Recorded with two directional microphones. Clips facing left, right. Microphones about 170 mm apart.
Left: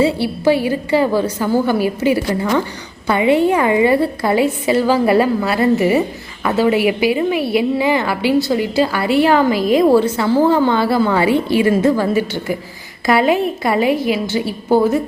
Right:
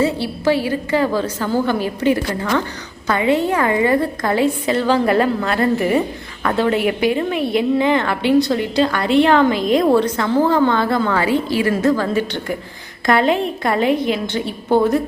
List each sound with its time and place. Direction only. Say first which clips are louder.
0.2 s a woman's voice: left 3 dB; 15° left (ahead or behind)
11.9 s a woman's voice: left 2 dB; 10° left (ahead or behind)